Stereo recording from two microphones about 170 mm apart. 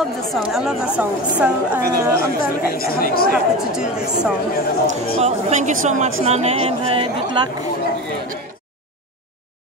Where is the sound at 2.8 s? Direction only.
60° left (ahead or behind).